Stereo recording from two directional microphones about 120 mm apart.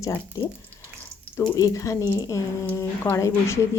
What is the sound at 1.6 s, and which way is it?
A woman's voice, 25° left (ahead or behind).